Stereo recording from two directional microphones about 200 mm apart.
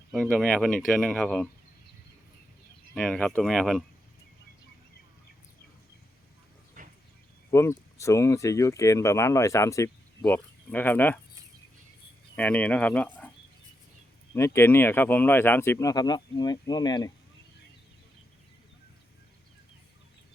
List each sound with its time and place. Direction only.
0.1 s speech: centre (ahead or behind)
2.9 s speech: 5° left (ahead or behind)
6.8 s vehicle: 40° right (ahead or behind)
7.5 s speech: 15° left (ahead or behind)
12.4 s speech: 5° left (ahead or behind)
14.3 s speech: 10° left (ahead or behind)